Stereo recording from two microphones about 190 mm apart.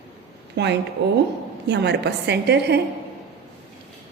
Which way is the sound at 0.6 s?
65° right (ahead or behind).